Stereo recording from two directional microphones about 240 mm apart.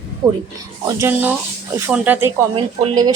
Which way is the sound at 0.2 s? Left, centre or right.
Centre.